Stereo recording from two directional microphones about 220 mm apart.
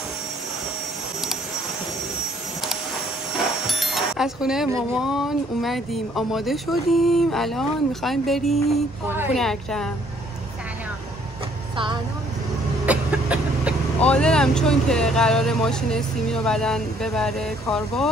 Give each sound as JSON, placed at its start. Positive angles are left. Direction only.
{"t": 3.6, "sound": "speech", "side_deg": 0}
{"t": 11.7, "sound": "vehicle", "side_deg": -20}
{"t": 12.8, "sound": "a sound", "side_deg": -5}
{"t": 13.9, "sound": "speech", "side_deg": 5}